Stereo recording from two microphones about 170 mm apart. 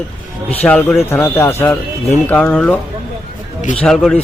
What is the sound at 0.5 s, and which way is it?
Speech, 10° left (ahead or behind).